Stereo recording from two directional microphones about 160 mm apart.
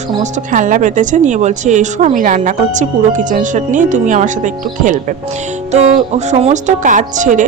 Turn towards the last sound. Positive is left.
turn(degrees=-50)  # may be behind; listen again after turning